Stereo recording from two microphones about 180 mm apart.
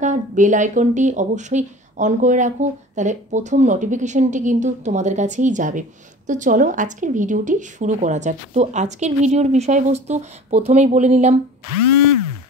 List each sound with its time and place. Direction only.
0.0 s a woman's voice: 45° right (ahead or behind)